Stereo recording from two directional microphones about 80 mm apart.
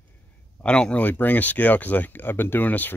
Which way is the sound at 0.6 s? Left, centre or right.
Centre.